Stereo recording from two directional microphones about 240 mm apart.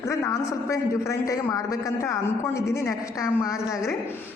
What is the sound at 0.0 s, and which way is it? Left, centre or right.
A man's voice, centre.